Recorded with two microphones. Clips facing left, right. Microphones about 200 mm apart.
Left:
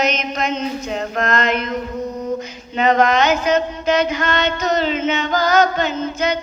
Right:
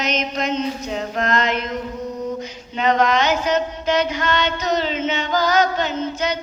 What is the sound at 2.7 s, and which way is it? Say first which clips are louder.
Mantra: left 3 dB; 50° left (ahead or behind).